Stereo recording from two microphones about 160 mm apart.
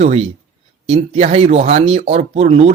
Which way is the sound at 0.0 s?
40° right (ahead or behind).